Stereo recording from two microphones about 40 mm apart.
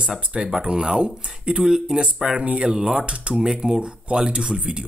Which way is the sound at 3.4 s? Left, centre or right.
Centre.